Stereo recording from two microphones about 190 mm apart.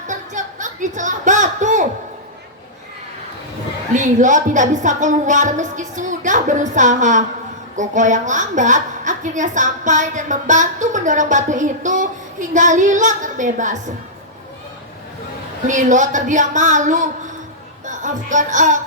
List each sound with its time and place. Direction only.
0.1 s a sound: 40° right (ahead or behind)
3.9 s a woman's voice: 40° right (ahead or behind)
15.6 s a woman's voice: 40° right (ahead or behind)